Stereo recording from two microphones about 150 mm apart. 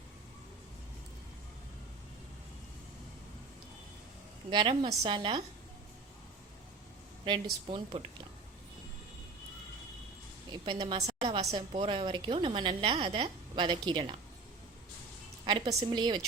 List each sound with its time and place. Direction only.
4.4 s a woman's voice: 35° right (ahead or behind)
7.3 s a woman's voice: 35° right (ahead or behind)
10.5 s a woman's voice: 30° right (ahead or behind)
15.4 s a woman's voice: 35° right (ahead or behind)